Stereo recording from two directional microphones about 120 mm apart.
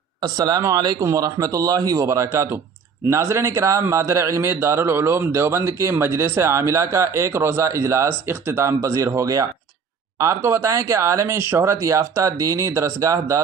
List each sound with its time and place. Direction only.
0.2 s a man's voice: 35° right (ahead or behind)